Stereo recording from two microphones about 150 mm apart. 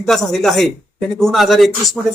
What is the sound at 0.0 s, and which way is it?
Speech, centre (ahead or behind).